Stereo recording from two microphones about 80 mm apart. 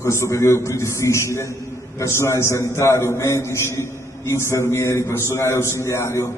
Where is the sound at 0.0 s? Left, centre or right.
Left.